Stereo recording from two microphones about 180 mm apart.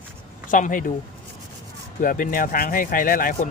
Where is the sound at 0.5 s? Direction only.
45° left (ahead or behind).